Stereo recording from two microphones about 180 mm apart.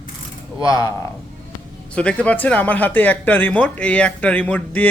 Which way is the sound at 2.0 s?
5° left (ahead or behind).